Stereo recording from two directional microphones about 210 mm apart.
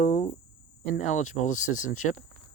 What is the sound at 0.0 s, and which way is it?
Cricket, 30° left (ahead or behind).